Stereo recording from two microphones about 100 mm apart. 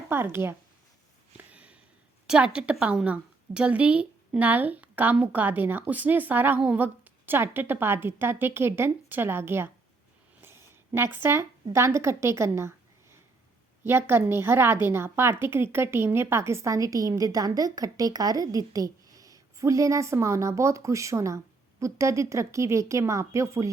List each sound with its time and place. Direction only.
0.1 s speech: 25° right (ahead or behind)
1.4 s sniff: 15° right (ahead or behind)
2.2 s a woman's voice: 10° right (ahead or behind)
10.4 s a sound: 25° right (ahead or behind)
11.7 s a woman's voice: 30° right (ahead or behind)